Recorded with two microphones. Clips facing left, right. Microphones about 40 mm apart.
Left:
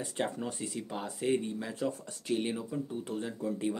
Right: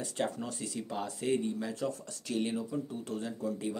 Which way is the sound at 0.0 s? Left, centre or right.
Centre.